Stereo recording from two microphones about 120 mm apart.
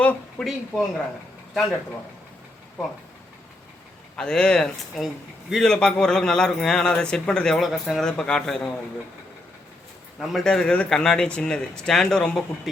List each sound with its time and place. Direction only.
0.0 s a sound: 10° left (ahead or behind)
0.4 s a man's voice: centre (ahead or behind)
4.2 s a man's voice: 5° left (ahead or behind)
10.2 s a man's voice: centre (ahead or behind)